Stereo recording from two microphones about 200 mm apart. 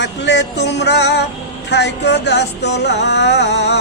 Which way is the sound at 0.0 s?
60° left (ahead or behind).